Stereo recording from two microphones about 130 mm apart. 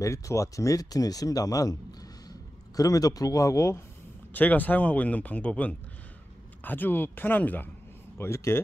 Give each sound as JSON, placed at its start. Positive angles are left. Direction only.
{"t": 0.0, "sound": "speech", "side_deg": 25}